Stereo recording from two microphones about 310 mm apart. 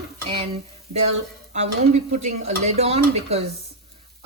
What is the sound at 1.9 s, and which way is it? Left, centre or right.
Speech, right.